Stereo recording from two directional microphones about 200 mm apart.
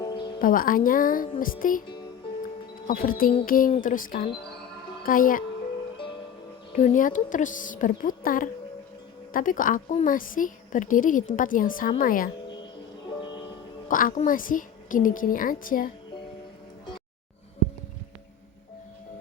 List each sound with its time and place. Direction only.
0.0 s music: 20° left (ahead or behind)
0.4 s a woman's voice: 45° left (ahead or behind)
2.8 s a woman's voice: 45° left (ahead or behind)
6.7 s a woman's voice: 40° left (ahead or behind)
13.8 s a woman's voice: 40° left (ahead or behind)